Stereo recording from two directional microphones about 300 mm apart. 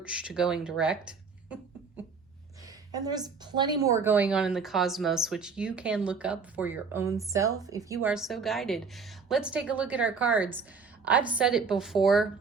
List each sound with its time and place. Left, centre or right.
0.0 s speech: centre
2.6 s a woman's voice: centre